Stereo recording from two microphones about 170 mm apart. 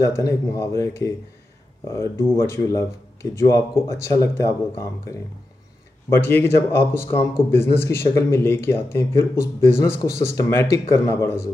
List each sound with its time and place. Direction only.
0.0 s speech: 20° left (ahead or behind)
6.0 s speech: 15° left (ahead or behind)